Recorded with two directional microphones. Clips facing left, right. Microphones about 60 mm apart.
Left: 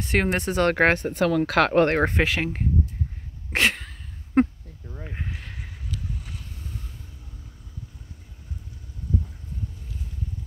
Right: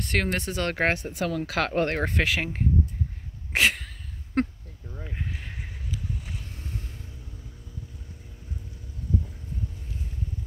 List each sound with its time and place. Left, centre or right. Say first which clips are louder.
0.2 s speech: left 6 dB; left
0.7 s speech: left 5 dB; left
2.2 s speech: left 2 dB; centre
3.5 s sneeze: left 1 dB; centre
4.4 s a sound: left 6 dB; centre
5.3 s a sound: even; centre